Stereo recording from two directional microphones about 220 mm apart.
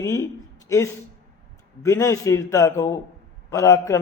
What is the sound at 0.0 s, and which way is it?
A man's voice, 15° left (ahead or behind).